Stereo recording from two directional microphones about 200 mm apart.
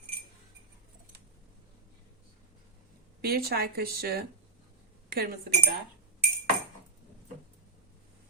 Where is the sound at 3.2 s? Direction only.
50° right (ahead or behind).